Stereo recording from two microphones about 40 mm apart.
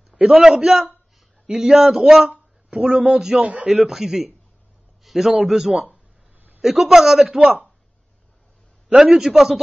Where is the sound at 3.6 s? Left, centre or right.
Centre.